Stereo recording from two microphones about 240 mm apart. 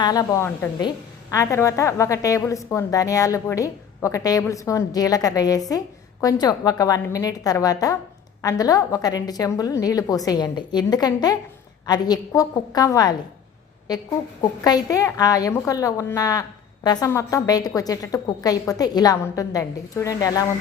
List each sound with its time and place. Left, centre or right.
0.0 s a woman's voice: centre
14.6 s a woman's voice: centre